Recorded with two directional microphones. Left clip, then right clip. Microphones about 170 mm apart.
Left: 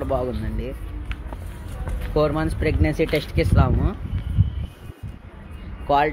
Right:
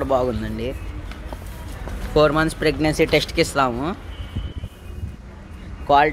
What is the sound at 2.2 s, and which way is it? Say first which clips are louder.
Speech: right 5 dB; 5° right (ahead or behind).